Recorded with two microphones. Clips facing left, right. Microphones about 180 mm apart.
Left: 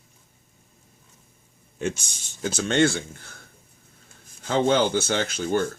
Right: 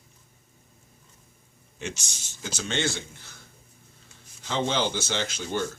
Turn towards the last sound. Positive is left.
turn(degrees=50)  # may be behind; listen again after turning